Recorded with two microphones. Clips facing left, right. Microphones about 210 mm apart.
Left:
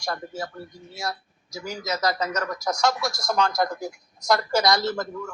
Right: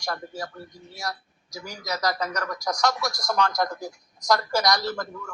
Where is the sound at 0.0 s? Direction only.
25° left (ahead or behind).